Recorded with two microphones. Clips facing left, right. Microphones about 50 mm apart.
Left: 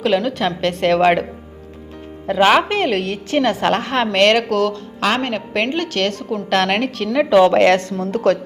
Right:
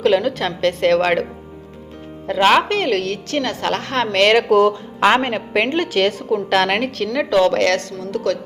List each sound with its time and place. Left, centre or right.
0.0 s a woman's voice: centre
2.2 s a woman's voice: centre
4.4 s a woman's voice: centre; by 8.4 s left